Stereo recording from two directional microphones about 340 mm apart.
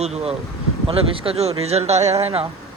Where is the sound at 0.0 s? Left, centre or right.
Centre.